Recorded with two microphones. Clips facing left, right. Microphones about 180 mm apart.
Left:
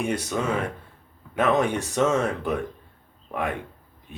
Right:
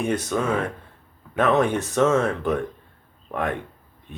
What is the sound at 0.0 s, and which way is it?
Speech, 10° left (ahead or behind).